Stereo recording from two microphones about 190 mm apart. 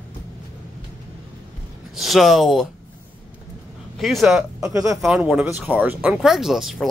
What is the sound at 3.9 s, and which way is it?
Speech, centre (ahead or behind).